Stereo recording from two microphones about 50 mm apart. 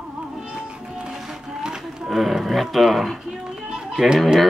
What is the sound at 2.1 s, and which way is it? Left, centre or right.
Speech, centre.